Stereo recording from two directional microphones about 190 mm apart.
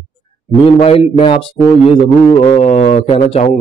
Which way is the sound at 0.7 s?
30° left (ahead or behind).